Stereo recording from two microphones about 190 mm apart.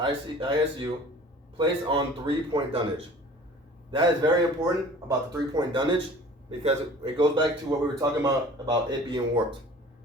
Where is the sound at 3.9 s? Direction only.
25° right (ahead or behind).